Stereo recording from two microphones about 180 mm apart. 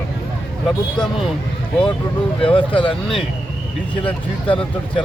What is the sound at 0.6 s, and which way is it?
Speech, centre (ahead or behind).